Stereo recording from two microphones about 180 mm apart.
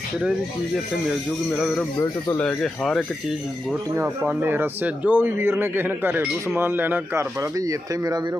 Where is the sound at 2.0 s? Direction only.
15° left (ahead or behind); by 3.8 s centre (ahead or behind).